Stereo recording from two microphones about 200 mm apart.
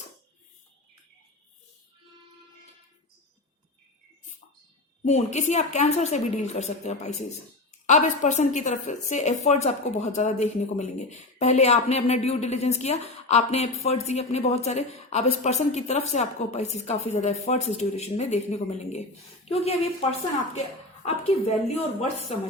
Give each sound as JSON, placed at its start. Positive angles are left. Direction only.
{"t": 5.0, "sound": "a woman's voice", "side_deg": 35}